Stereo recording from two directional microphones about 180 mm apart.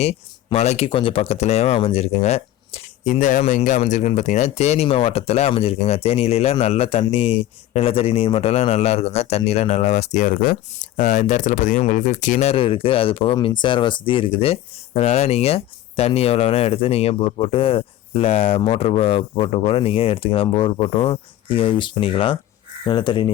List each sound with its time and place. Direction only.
0.0 s speech: 35° left (ahead or behind)